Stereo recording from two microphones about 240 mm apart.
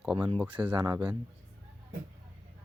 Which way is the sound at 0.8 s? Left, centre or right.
Centre.